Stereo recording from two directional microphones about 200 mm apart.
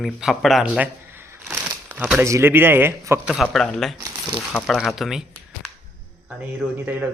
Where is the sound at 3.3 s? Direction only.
Centre (ahead or behind).